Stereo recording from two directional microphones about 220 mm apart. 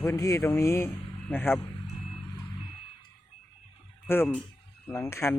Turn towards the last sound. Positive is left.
turn(degrees=10)  # may be behind; listen again after turning